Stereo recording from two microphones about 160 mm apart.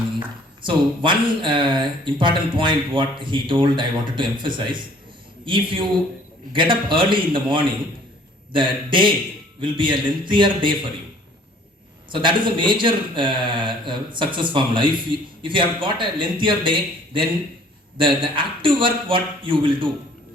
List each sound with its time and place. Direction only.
0.6 s speech: 30° right (ahead or behind)
12.1 s speech: 30° right (ahead or behind)